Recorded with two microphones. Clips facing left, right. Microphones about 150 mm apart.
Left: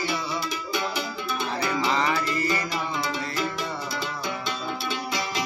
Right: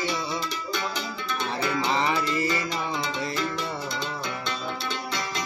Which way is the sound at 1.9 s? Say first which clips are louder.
Even; 20° right (ahead or behind).